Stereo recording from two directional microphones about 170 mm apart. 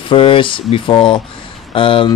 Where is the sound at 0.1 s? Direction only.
30° left (ahead or behind).